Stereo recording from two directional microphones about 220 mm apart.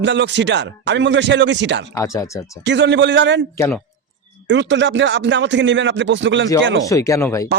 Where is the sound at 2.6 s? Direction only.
55° right (ahead or behind).